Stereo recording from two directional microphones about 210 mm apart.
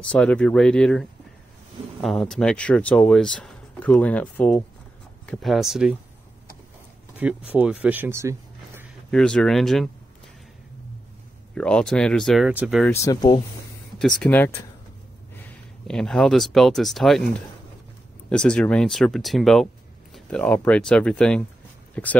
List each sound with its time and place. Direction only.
0.1 s speech: 5° left (ahead or behind)
7.2 s speech: 5° right (ahead or behind)
9.1 s speech: 5° left (ahead or behind)
11.5 s speech: 5° left (ahead or behind)
12.9 s speech: 15° left (ahead or behind)
13.9 s speech: 5° left (ahead or behind)
15.9 s speech: 5° left (ahead or behind)
18.3 s speech: 5° left (ahead or behind)